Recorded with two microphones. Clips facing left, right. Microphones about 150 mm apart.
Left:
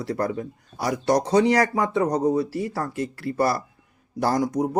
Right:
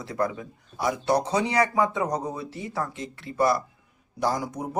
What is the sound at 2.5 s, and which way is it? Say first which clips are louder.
Speech: left 4 dB; 70° left (ahead or behind).